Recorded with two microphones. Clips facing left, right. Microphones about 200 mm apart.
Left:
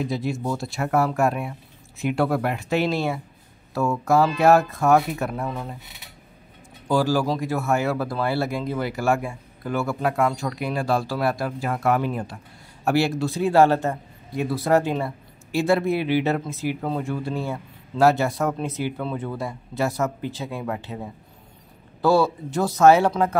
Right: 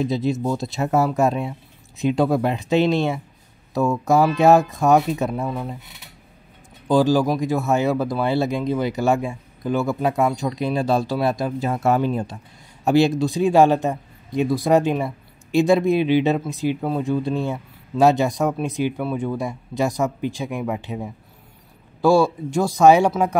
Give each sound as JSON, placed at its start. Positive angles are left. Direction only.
{"t": 0.0, "sound": "speech", "side_deg": -20}
{"t": 6.9, "sound": "speech", "side_deg": -20}